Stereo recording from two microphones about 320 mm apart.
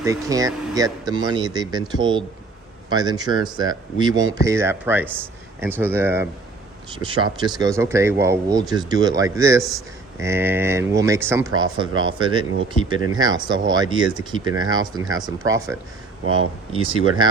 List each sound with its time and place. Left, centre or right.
0.0 s speech: centre
16.2 s speech: right
16.7 s speech: centre